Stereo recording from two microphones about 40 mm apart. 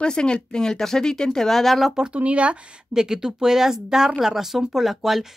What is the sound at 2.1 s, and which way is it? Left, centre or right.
Speech, right.